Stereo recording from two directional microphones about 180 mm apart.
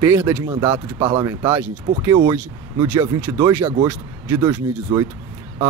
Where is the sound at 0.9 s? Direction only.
20° right (ahead or behind).